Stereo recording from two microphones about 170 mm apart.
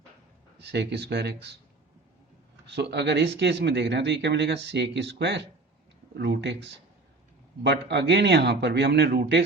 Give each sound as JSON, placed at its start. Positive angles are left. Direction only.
{"t": 0.6, "sound": "speech", "side_deg": -85}
{"t": 2.6, "sound": "a man's voice", "side_deg": -90}